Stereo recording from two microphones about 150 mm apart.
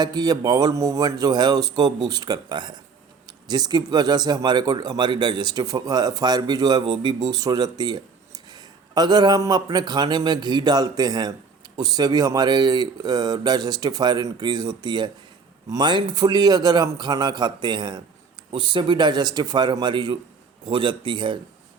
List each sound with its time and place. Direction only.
0.0 s a man's voice: 25° right (ahead or behind)